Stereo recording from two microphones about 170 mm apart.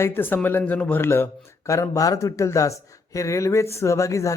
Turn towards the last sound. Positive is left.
turn(degrees=20)  # may be behind; listen again after turning